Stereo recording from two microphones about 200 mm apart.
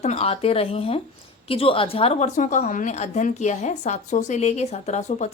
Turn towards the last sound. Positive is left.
turn(degrees=35)  # may be behind; listen again after turning